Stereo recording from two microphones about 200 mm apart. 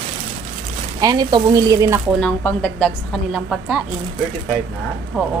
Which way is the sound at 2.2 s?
5° left (ahead or behind).